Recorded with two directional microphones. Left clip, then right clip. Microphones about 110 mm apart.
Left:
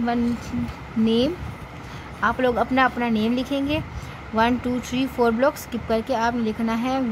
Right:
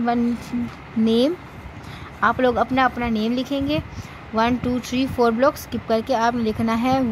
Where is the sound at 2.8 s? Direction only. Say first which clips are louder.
Even; 5° right (ahead or behind).